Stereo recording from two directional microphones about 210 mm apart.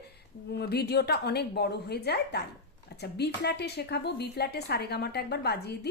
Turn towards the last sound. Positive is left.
turn(degrees=50)  # may be behind; listen again after turning